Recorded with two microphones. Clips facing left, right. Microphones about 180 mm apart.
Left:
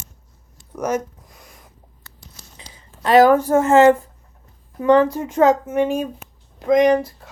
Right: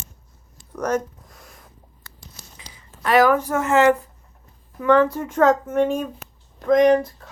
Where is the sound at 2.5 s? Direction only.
30° left (ahead or behind).